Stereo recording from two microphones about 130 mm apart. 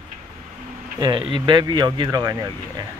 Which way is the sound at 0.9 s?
30° right (ahead or behind).